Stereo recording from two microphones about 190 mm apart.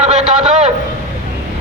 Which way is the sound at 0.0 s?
35° right (ahead or behind).